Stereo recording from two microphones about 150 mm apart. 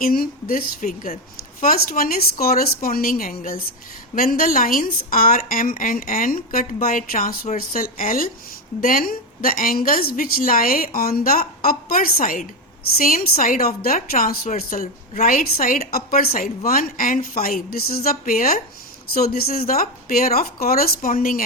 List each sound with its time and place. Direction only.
0.0 s a woman's voice: 75° left (ahead or behind)
14.7 s a woman's voice: 60° left (ahead or behind)
19.1 s a woman's voice: 80° left